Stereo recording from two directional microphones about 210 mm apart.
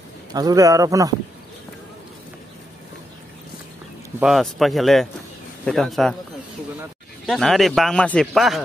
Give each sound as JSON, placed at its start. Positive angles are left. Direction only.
{"t": 0.3, "sound": "speech", "side_deg": -15}
{"t": 4.2, "sound": "speech", "side_deg": 0}
{"t": 7.2, "sound": "speech", "side_deg": 0}